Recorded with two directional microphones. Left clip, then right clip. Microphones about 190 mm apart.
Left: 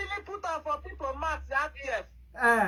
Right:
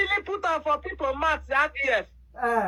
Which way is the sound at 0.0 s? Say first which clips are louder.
Right 9 dB; 35° right (ahead or behind).